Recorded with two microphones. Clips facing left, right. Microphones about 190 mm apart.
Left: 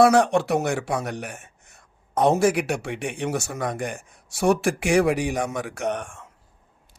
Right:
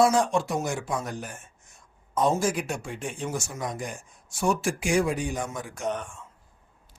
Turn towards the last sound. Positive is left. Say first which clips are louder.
# left 3 dB
turn(degrees=65)  # may be behind; listen again after turning